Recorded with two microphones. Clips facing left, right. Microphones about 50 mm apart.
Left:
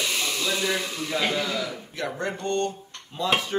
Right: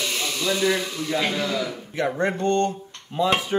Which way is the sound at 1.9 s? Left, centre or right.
Right.